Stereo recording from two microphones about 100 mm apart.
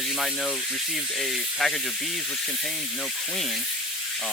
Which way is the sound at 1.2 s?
Centre (ahead or behind).